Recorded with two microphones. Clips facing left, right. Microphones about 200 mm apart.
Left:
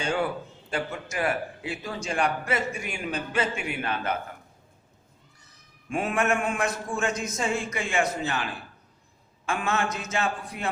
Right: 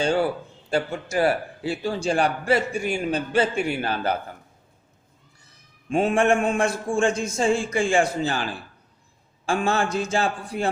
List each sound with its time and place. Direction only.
0.0 s a man's voice: 30° right (ahead or behind)
5.9 s a man's voice: 25° right (ahead or behind)
9.5 s a man's voice: 30° right (ahead or behind)